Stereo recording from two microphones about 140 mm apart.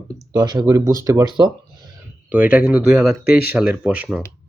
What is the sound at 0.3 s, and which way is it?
Speech, 30° right (ahead or behind).